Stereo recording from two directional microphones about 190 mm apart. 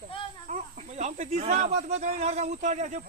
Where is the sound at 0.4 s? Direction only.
40° right (ahead or behind).